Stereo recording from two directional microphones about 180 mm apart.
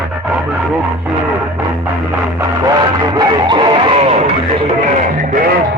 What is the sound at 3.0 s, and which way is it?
Music, 20° right (ahead or behind).